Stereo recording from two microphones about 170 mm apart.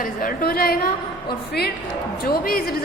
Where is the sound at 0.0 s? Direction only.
55° left (ahead or behind).